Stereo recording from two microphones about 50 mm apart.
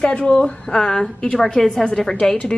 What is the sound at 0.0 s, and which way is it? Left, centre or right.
A woman's voice, left.